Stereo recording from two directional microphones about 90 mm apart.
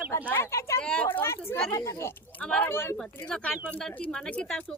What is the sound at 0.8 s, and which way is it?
Speech, 10° left (ahead or behind).